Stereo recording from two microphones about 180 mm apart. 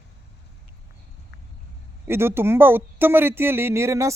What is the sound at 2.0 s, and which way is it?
Speech, 15° right (ahead or behind).